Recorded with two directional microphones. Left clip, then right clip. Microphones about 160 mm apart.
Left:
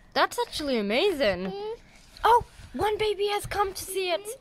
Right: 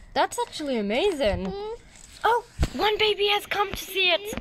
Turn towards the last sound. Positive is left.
turn(degrees=10)  # may be behind; listen again after turning